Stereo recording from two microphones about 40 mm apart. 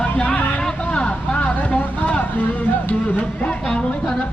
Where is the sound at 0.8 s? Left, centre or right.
Left.